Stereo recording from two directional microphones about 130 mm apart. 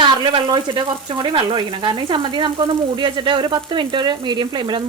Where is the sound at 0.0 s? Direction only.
40° right (ahead or behind).